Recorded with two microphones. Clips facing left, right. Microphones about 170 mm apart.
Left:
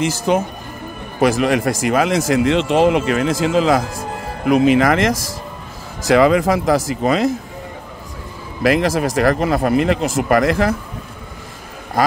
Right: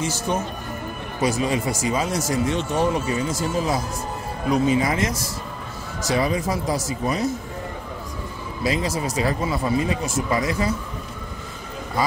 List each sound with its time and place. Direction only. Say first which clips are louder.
0.3 s speech: left 7 dB; 90° left
4.5 s speech: left 7 dB; 75° left (ahead or behind)
6.1 s speech: left 10 dB; 90° left
8.6 s speech: left 8 dB; 90° left